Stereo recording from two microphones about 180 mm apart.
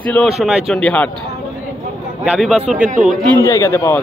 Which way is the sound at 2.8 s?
45° right (ahead or behind).